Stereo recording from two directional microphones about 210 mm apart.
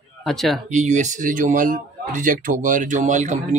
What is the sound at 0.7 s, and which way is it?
A man's voice, 35° right (ahead or behind).